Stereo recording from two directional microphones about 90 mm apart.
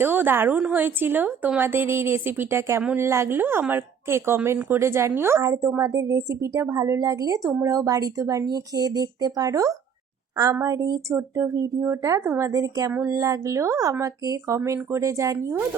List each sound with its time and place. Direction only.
0.0 s a woman's voice: 25° right (ahead or behind)
12.5 s speech: 40° right (ahead or behind)
12.9 s a woman's voice: 20° right (ahead or behind)
13.1 s speech: 40° right (ahead or behind)